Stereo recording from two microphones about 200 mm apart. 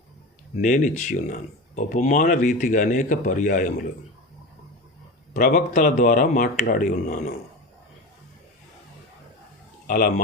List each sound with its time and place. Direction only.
0.6 s speech: 40° left (ahead or behind)
5.3 s speech: 45° left (ahead or behind)
9.8 s speech: 45° left (ahead or behind)